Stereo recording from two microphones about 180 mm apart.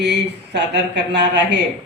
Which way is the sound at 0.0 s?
70° right (ahead or behind).